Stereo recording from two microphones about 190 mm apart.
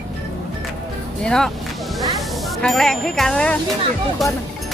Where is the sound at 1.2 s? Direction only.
5° left (ahead or behind).